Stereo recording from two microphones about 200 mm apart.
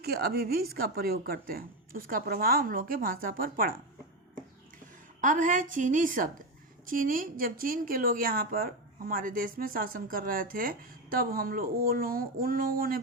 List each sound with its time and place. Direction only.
0.0 s a woman's voice: 50° right (ahead or behind)
5.2 s a woman's voice: 40° right (ahead or behind)